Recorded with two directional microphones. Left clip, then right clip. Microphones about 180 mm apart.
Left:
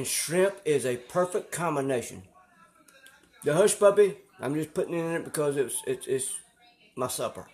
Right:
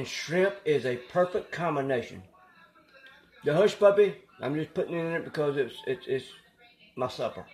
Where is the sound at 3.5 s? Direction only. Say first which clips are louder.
Even; 15° left (ahead or behind).